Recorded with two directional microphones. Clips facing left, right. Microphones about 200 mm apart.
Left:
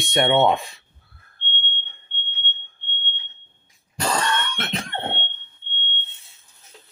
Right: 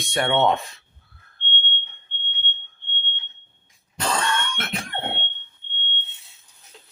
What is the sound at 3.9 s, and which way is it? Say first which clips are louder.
Cough: left 1 dB; 5° left (ahead or behind).